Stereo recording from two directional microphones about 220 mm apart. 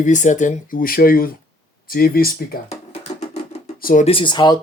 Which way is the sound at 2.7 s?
30° left (ahead or behind).